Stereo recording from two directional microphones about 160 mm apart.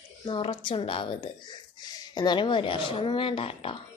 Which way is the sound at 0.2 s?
30° left (ahead or behind).